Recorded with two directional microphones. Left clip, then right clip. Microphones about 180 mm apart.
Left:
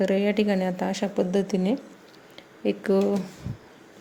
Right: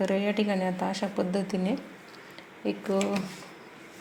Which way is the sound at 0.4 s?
30° left (ahead or behind).